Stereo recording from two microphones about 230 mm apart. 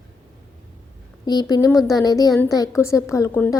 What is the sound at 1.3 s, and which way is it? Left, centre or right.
A woman's voice, centre.